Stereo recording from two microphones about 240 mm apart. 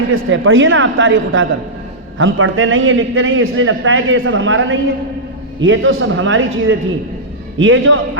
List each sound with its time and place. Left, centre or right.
0.1 s a man's voice: right